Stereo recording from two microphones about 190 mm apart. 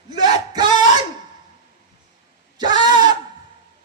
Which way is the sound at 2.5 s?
20° right (ahead or behind).